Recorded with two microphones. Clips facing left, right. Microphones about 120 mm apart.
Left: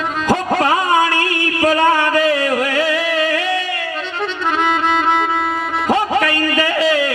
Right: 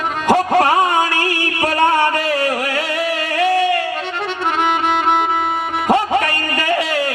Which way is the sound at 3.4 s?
55° right (ahead or behind).